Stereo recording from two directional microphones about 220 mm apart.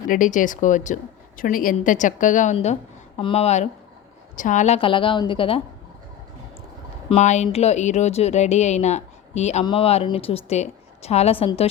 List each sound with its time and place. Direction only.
0.1 s a woman's voice: 35° left (ahead or behind)
7.1 s speech: 30° left (ahead or behind)